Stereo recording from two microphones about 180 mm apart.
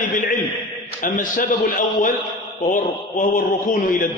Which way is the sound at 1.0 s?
50° left (ahead or behind).